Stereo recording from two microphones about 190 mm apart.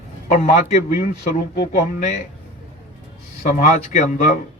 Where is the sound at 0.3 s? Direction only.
40° left (ahead or behind).